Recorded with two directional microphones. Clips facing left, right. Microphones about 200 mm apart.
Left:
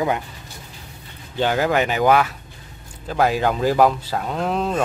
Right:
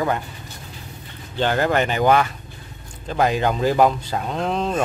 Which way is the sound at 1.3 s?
10° left (ahead or behind).